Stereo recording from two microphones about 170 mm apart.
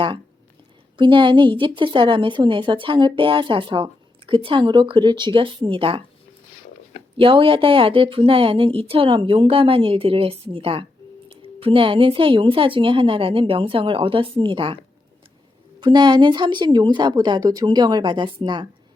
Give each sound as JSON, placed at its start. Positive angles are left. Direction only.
{"t": 0.9, "sound": "a woman's voice", "side_deg": -30}
{"t": 7.2, "sound": "a woman's voice", "side_deg": -30}
{"t": 15.8, "sound": "a woman's voice", "side_deg": -25}